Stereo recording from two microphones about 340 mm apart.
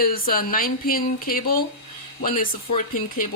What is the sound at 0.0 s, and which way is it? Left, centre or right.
A woman's voice, left.